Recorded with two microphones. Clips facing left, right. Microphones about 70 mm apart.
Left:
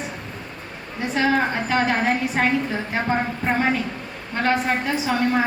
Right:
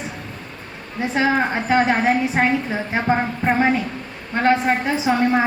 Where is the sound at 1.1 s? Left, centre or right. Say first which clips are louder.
Right 1 dB; centre.